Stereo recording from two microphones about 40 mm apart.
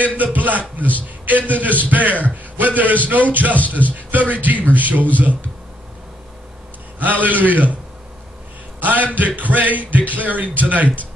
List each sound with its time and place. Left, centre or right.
0.0 s a man's voice: right
3.5 s speech: left
3.9 s a man's voice: right
7.0 s a man's voice: right
8.7 s a sound: right
9.4 s a man's voice: right